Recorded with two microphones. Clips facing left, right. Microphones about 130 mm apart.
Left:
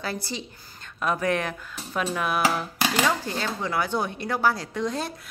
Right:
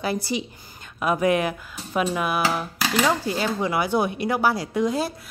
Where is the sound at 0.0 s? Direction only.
15° right (ahead or behind).